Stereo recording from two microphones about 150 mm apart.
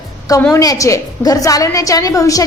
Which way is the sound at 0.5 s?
25° left (ahead or behind).